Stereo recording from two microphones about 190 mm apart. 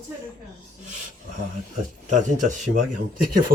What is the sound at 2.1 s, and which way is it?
Speech, 40° right (ahead or behind).